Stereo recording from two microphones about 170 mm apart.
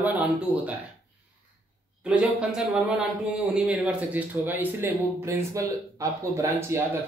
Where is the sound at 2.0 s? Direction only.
5° right (ahead or behind).